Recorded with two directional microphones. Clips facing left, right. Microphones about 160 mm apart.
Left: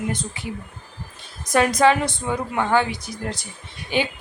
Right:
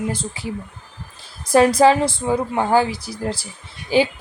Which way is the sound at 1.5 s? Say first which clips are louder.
Right 4 dB; 30° right (ahead or behind).